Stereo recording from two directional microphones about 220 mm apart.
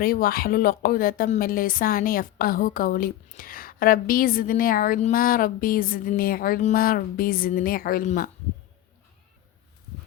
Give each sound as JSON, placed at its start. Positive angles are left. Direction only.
{"t": 0.0, "sound": "a woman's voice", "side_deg": 40}